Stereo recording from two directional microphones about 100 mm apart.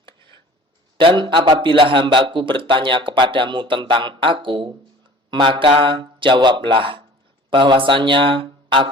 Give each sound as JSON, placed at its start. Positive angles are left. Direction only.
{"t": 0.9, "sound": "a man's voice", "side_deg": -55}